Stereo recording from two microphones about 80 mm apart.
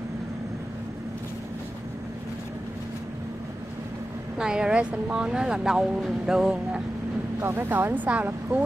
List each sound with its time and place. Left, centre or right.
4.4 s speech: centre
7.3 s speech: right